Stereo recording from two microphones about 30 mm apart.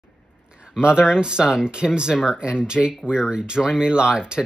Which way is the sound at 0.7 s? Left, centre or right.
Right.